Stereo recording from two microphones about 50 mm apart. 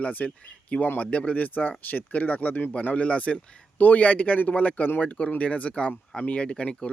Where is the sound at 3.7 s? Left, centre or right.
Left.